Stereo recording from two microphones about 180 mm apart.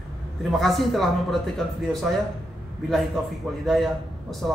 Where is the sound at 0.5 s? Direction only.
Centre (ahead or behind).